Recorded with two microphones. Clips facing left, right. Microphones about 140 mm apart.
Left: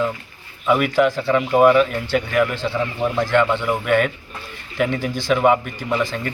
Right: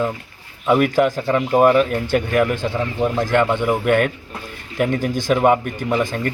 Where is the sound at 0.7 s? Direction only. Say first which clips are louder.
Right 1 dB; 45° right (ahead or behind).